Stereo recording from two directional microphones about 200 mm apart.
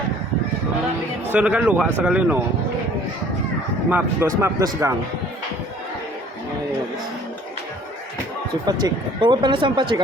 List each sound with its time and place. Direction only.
1.3 s speech: 5° right (ahead or behind)
3.8 s speech: 10° right (ahead or behind)
8.6 s speech: 20° right (ahead or behind)